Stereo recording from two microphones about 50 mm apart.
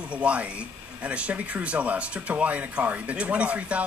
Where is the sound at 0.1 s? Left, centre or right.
Right.